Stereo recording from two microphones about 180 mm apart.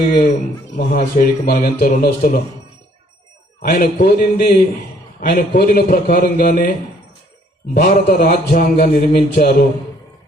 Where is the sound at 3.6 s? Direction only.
55° left (ahead or behind).